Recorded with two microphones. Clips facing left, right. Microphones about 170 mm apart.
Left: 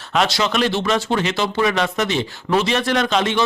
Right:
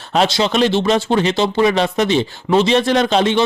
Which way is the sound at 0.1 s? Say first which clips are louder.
Right 3 dB; 30° right (ahead or behind).